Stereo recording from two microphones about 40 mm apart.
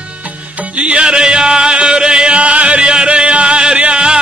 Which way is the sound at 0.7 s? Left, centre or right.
Right.